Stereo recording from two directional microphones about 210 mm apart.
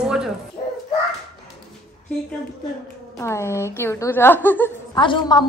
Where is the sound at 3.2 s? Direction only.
15° left (ahead or behind).